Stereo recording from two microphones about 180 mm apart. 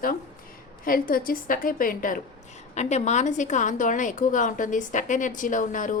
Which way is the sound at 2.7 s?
40° left (ahead or behind).